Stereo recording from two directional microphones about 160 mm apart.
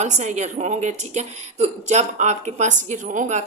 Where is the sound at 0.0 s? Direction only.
45° right (ahead or behind).